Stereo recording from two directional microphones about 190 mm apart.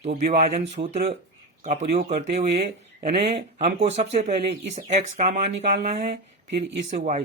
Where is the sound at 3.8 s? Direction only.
35° right (ahead or behind).